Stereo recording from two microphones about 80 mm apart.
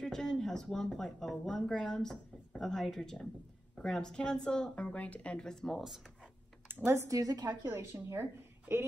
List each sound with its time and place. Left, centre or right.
0.0 s a woman's voice: centre
6.7 s speech: right
7.6 s a woman's voice: right